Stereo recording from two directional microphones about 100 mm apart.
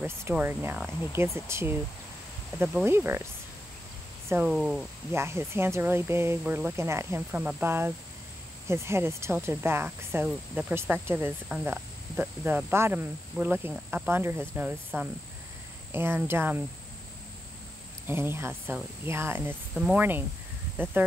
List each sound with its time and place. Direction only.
0.3 s speech: 20° right (ahead or behind)
4.5 s speech: 5° right (ahead or behind)
5.1 s speech: 25° right (ahead or behind)
10.7 s speech: 25° right (ahead or behind)
18.0 s speech: 25° right (ahead or behind)
19.7 s speech: 5° right (ahead or behind)
20.0 s speech: 20° right (ahead or behind)